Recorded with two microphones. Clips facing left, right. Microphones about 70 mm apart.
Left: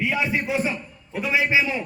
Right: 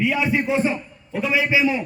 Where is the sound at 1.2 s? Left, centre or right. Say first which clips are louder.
Right 1 dB; left.